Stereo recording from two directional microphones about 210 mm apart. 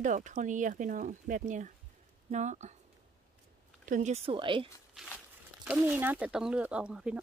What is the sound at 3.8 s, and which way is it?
Speech, 35° right (ahead or behind).